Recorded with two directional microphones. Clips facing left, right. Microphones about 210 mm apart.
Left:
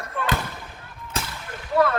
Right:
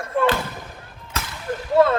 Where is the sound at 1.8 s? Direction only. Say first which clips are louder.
Right 4 dB; 25° right (ahead or behind).